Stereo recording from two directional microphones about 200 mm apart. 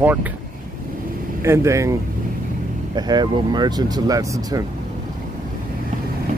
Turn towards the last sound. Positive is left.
turn(degrees=-15)  # may be behind; listen again after turning